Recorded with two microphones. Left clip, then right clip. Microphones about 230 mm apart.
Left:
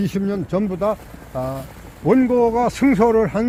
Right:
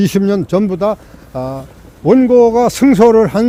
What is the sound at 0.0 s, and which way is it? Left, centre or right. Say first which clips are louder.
Speech: right 10 dB; right.